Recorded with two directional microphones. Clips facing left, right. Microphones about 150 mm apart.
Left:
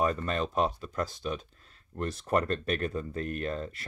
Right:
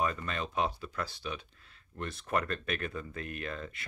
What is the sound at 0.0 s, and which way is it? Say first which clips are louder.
Speech: left 5 dB; 40° left (ahead or behind).